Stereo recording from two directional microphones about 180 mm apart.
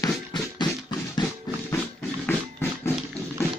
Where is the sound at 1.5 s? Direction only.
20° left (ahead or behind).